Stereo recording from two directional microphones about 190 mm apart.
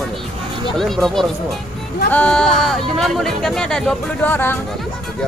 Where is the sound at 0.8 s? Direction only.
Centre (ahead or behind).